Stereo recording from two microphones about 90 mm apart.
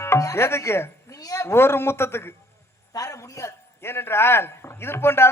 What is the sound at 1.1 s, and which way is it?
A man's voice, 40° left (ahead or behind).